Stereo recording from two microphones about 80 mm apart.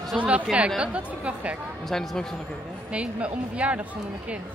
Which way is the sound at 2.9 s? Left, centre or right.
Centre.